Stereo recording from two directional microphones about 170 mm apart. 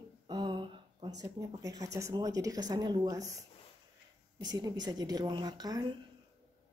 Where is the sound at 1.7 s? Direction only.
20° right (ahead or behind).